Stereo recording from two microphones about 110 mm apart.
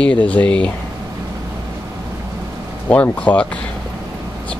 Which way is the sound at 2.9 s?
10° left (ahead or behind).